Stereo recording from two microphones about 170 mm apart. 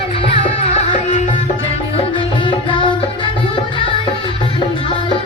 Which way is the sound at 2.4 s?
30° left (ahead or behind).